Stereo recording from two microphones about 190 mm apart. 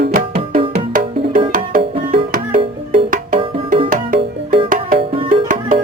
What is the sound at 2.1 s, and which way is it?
Music, 45° right (ahead or behind).